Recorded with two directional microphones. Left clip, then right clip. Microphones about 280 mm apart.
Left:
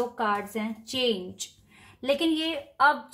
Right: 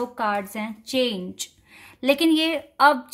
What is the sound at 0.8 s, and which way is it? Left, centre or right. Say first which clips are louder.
A woman's voice: right 4 dB; right.